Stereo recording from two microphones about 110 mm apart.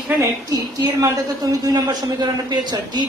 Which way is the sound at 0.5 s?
35° right (ahead or behind).